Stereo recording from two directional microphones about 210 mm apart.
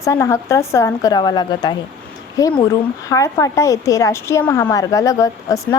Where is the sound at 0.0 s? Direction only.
15° left (ahead or behind).